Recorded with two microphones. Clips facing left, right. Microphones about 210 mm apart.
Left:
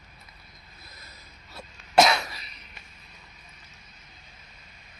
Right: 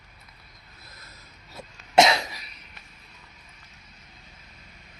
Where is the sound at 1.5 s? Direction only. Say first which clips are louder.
Right 1 dB; 25° right (ahead or behind).